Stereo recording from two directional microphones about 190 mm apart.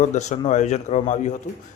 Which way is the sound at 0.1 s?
40° left (ahead or behind).